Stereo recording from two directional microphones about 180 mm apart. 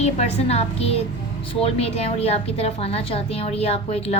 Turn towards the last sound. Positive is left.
turn(degrees=35)  # may be behind; listen again after turning